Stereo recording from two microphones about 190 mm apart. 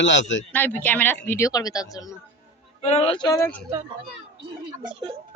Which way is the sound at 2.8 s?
30° left (ahead or behind).